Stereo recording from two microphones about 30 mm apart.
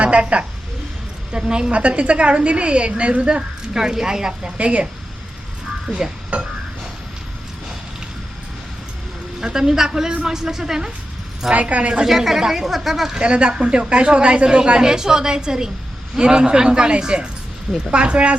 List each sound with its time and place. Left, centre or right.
0.0 s a woman's voice: right
1.3 s a woman's voice: right
1.7 s speech: right
3.8 s a woman's voice: centre
4.5 s a woman's voice: right
6.3 s a sound: right
9.4 s a woman's voice: centre
11.5 s a woman's voice: right
12.0 s speech: centre
13.1 s a woman's voice: right